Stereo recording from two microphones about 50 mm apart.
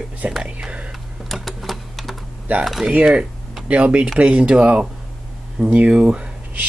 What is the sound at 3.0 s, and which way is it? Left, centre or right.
Speech, centre.